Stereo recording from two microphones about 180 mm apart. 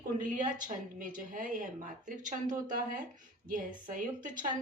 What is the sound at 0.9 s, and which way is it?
Speech, 50° right (ahead or behind).